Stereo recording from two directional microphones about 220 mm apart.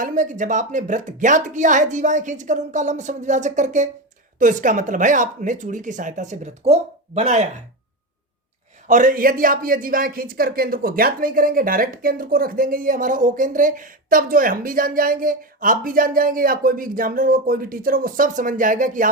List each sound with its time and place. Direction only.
0.0 s speech: 35° right (ahead or behind)
8.9 s speech: 35° right (ahead or behind)